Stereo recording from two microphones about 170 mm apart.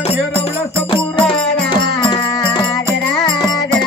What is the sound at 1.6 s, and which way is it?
Music, 30° left (ahead or behind).